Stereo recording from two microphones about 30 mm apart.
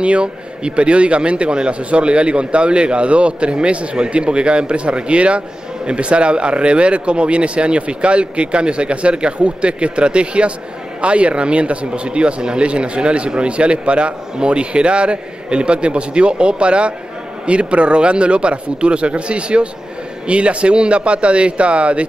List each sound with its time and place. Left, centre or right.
0.0 s speech: right